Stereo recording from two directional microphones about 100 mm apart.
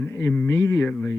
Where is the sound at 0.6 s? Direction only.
20° left (ahead or behind).